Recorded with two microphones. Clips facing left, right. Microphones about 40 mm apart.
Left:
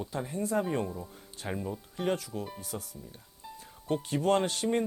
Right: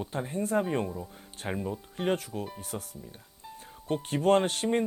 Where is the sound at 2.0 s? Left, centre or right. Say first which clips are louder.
Right 2 dB; right.